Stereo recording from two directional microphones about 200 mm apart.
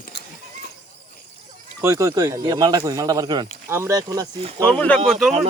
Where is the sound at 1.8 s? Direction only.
15° right (ahead or behind).